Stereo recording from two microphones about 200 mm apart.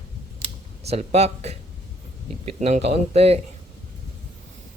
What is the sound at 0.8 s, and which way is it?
Speech, 30° right (ahead or behind).